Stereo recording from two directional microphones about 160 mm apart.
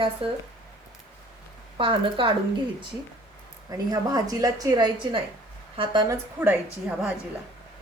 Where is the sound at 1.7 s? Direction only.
35° right (ahead or behind).